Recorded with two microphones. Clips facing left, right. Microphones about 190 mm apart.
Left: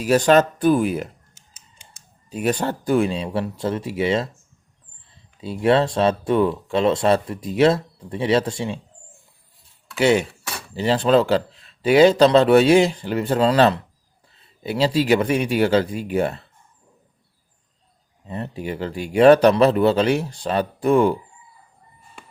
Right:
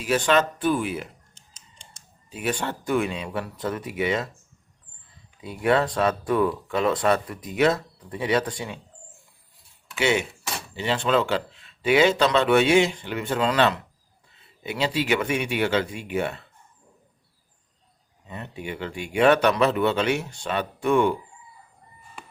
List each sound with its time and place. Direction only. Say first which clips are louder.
0.0 s speech: left 6 dB; 40° left (ahead or behind)
1.4 s computer keyboard: even; 5° left (ahead or behind)
2.3 s speech: left 6 dB; 40° left (ahead or behind)
9.9 s speech: left 6 dB; 40° left (ahead or behind)
18.3 s speech: left 6 dB; 35° left (ahead or behind)